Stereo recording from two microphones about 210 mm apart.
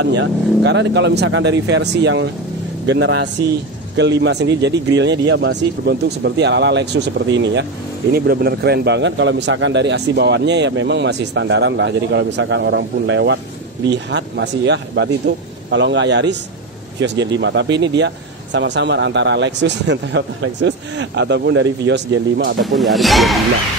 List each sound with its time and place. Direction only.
0.0 s speech: 55° right (ahead or behind)
8.1 s speech: 45° right (ahead or behind)
22.6 s speech: centre (ahead or behind)